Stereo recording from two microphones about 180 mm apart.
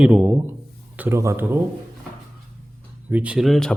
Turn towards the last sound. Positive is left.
turn(degrees=0)  # may be behind; listen again after turning